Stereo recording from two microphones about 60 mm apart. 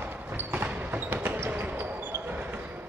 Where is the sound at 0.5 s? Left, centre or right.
Right.